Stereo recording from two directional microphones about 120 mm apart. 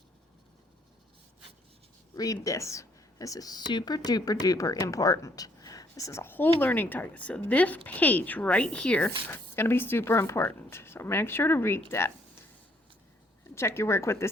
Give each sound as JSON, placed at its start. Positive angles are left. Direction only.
{"t": 2.1, "sound": "speech", "side_deg": 30}
{"t": 13.6, "sound": "speech", "side_deg": 20}